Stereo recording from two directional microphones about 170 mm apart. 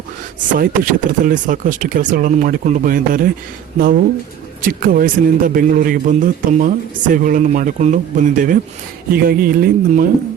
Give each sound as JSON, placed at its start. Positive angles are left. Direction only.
{"t": 0.3, "sound": "a man's voice", "side_deg": -55}